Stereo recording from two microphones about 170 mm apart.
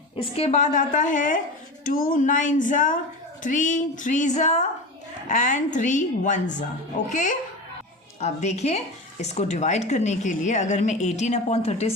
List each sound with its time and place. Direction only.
0.2 s a woman's voice: 35° left (ahead or behind)